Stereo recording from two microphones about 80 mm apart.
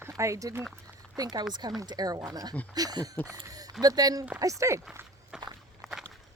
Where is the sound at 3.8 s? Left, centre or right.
Right.